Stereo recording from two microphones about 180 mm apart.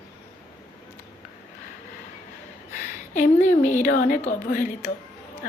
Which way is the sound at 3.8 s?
45° left (ahead or behind).